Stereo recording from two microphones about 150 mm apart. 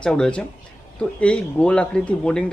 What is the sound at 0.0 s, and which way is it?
Speech, 5° left (ahead or behind).